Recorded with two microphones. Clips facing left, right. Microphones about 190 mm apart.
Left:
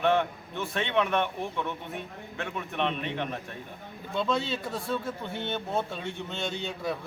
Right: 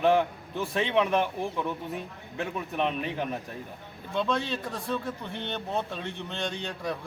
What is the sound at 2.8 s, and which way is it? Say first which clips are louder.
A man's voice: right 1 dB; 5° right (ahead or behind).